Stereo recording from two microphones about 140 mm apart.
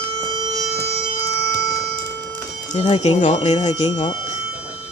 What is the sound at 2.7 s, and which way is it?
Speech, 50° left (ahead or behind).